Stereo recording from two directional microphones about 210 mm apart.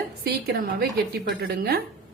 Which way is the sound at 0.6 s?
45° right (ahead or behind).